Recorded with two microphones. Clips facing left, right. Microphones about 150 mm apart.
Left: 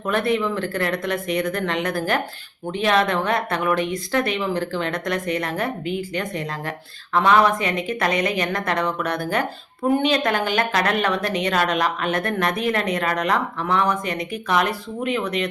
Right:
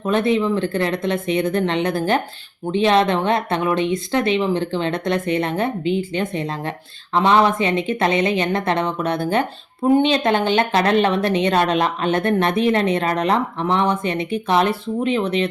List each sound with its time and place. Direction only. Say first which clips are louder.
0.0 s speech: right 3 dB; 20° right (ahead or behind)